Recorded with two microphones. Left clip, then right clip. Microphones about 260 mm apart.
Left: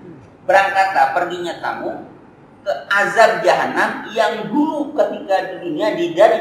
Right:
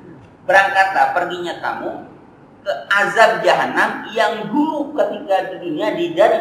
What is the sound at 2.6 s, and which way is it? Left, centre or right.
A man's voice, centre.